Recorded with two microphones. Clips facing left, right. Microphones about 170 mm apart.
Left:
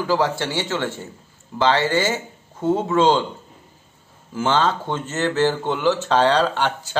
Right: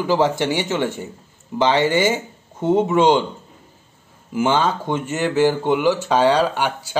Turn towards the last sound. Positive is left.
turn(degrees=-10)  # may be behind; listen again after turning